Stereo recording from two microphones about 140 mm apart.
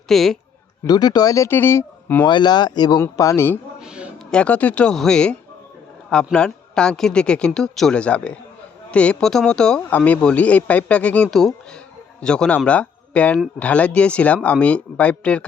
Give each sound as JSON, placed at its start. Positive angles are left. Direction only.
{"t": 0.1, "sound": "a man's voice", "side_deg": 0}
{"t": 0.9, "sound": "speech", "side_deg": 30}
{"t": 2.2, "sound": "speech", "side_deg": 30}
{"t": 3.0, "sound": "speech", "side_deg": 20}
{"t": 3.8, "sound": "a sound", "side_deg": -5}
{"t": 4.3, "sound": "speech", "side_deg": 10}